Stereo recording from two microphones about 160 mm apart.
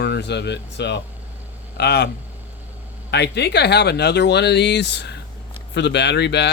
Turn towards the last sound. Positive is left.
turn(degrees=90)